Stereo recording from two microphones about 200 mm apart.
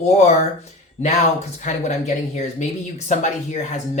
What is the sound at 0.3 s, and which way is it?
Speech, 35° left (ahead or behind).